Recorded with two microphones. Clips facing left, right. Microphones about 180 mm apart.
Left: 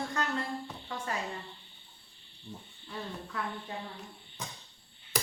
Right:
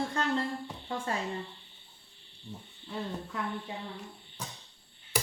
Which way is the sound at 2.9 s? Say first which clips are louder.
Right 3 dB; 15° right (ahead or behind).